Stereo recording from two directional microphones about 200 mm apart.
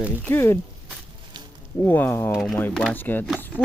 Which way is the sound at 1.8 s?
10° left (ahead or behind).